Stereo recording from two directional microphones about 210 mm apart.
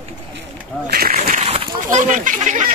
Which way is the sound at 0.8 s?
45° right (ahead or behind).